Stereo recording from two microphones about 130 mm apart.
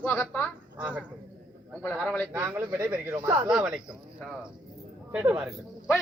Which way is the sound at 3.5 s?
5° right (ahead or behind).